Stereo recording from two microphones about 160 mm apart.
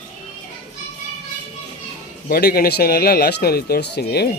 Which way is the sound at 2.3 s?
75° left (ahead or behind).